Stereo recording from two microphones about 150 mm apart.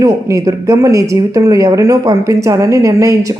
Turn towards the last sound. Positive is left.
turn(degrees=-20)  # may be behind; listen again after turning